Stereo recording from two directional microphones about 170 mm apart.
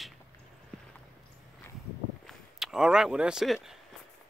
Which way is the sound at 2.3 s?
Centre (ahead or behind).